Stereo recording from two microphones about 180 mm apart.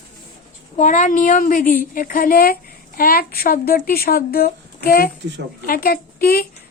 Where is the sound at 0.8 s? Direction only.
45° left (ahead or behind).